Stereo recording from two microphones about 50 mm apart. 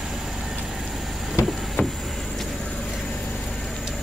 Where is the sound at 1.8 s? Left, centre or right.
Left.